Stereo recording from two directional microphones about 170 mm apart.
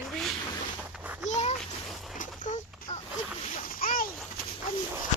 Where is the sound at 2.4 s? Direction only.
45° left (ahead or behind).